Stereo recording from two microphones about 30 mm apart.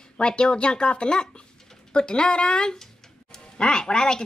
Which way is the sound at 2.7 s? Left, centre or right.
Centre.